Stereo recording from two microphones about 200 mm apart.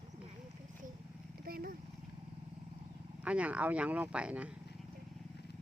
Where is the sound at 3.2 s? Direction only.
5° right (ahead or behind).